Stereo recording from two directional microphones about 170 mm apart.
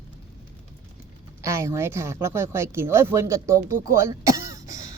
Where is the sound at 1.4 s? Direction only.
15° right (ahead or behind).